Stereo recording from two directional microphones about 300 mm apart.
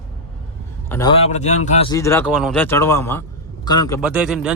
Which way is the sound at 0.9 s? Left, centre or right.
Centre.